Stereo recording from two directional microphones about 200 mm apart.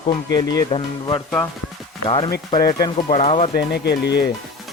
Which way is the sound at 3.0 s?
30° left (ahead or behind).